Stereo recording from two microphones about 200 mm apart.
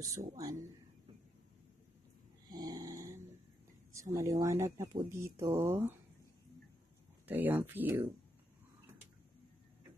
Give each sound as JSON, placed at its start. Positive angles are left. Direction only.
{"t": 0.0, "sound": "speech", "side_deg": -15}
{"t": 2.5, "sound": "snoring", "side_deg": -20}
{"t": 3.9, "sound": "speech", "side_deg": -15}
{"t": 7.2, "sound": "speech", "side_deg": -10}